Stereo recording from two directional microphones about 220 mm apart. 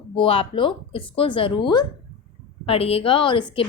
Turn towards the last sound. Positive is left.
turn(degrees=20)  # may be behind; listen again after turning